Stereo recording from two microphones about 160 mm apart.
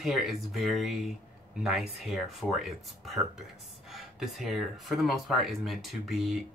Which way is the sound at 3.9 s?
Centre (ahead or behind).